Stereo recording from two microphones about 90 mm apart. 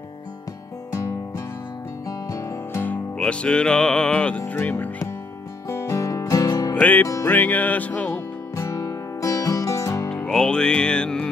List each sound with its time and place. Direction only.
2.0 s music: 40° left (ahead or behind)
2.8 s music: 15° left (ahead or behind)
4.4 s speech: 20° left (ahead or behind)
5.7 s music: 35° left (ahead or behind)
6.7 s music: 20° left (ahead or behind)
8.5 s music: 35° left (ahead or behind)
10.0 s music: 10° left (ahead or behind)